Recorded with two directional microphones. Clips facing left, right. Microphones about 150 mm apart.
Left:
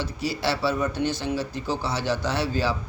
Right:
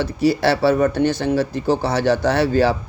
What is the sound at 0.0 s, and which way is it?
Speech, 70° right (ahead or behind).